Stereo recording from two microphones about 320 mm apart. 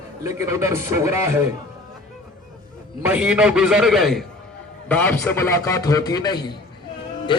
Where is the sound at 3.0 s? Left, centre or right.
Centre.